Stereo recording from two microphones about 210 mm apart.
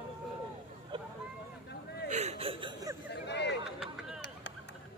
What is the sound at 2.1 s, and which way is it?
Chuckle, 30° right (ahead or behind).